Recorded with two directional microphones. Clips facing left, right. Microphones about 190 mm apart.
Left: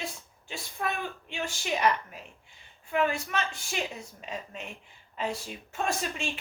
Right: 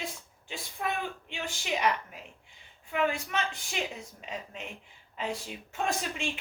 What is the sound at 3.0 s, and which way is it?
Speech, 15° right (ahead or behind).